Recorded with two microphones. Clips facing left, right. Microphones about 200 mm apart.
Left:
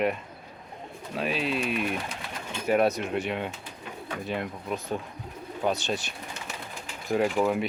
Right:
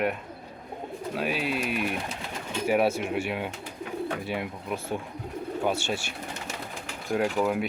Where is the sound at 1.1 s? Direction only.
Centre (ahead or behind).